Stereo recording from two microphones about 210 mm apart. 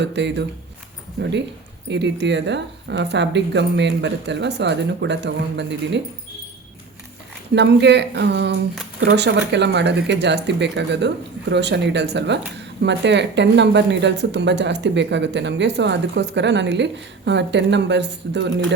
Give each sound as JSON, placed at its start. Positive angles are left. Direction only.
{"t": 0.0, "sound": "speech", "side_deg": -55}
{"t": 7.5, "sound": "speech", "side_deg": -55}
{"t": 9.0, "sound": "speech", "side_deg": -65}